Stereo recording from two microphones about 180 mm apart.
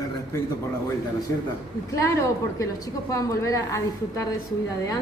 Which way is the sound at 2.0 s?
15° left (ahead or behind).